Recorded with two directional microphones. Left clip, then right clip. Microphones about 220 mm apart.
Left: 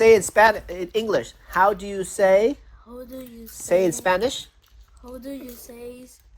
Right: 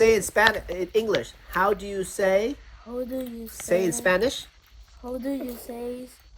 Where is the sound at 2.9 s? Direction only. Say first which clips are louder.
Right 7 dB; 30° right (ahead or behind).